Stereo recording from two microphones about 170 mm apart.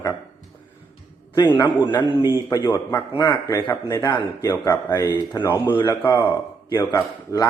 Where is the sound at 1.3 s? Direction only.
25° left (ahead or behind).